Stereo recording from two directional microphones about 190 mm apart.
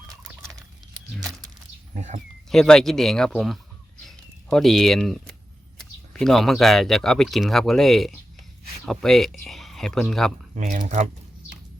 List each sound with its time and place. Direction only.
1.9 s speech: 40° right (ahead or behind)
2.5 s speech: 5° left (ahead or behind)
4.0 s a sound: centre (ahead or behind)
5.7 s speech: centre (ahead or behind)
10.5 s speech: 45° right (ahead or behind)